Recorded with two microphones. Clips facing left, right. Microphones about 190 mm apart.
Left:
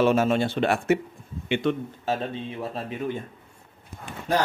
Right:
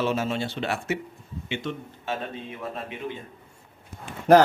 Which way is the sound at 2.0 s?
35° left (ahead or behind).